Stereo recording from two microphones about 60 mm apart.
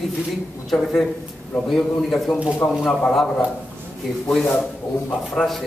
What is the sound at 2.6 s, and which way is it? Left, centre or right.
Speech, left.